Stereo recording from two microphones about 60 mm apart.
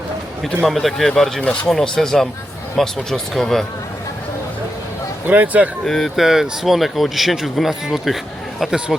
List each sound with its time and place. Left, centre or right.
0.4 s speech: centre
1.4 s speech: centre
1.7 s speech: centre
5.3 s speech: right
5.8 s speech: centre
6.2 s speech: centre